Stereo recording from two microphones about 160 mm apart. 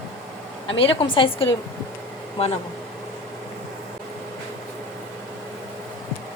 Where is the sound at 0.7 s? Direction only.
35° left (ahead or behind).